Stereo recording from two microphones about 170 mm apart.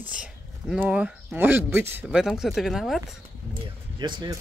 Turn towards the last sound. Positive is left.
turn(degrees=-25)  # may be behind; listen again after turning